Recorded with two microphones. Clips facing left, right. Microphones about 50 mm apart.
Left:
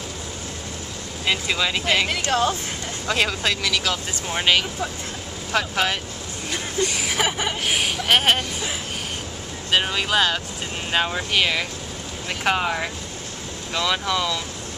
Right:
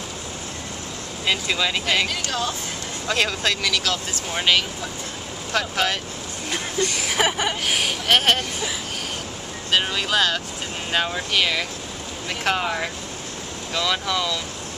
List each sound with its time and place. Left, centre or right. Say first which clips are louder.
1.2 s speech: even; centre
3.1 s speech: even; centre
7.1 s speech: right 2 dB; centre
9.7 s speech: left 1 dB; centre